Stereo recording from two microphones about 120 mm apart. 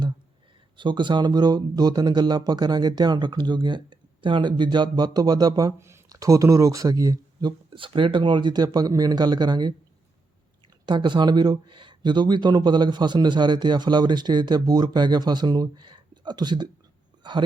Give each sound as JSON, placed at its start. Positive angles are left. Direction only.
{"t": 0.8, "sound": "speech", "side_deg": -40}
{"t": 7.8, "sound": "speech", "side_deg": -45}
{"t": 10.8, "sound": "speech", "side_deg": -40}